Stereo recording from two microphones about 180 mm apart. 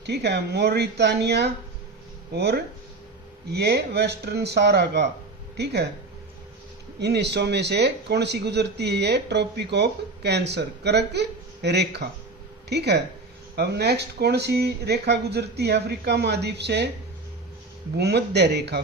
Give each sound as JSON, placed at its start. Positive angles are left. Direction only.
{"t": 0.0, "sound": "speech", "side_deg": -70}
{"t": 7.0, "sound": "speech", "side_deg": -70}
{"t": 17.9, "sound": "speech", "side_deg": -65}